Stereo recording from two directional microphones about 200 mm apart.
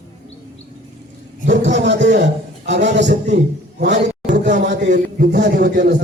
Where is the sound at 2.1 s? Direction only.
60° right (ahead or behind).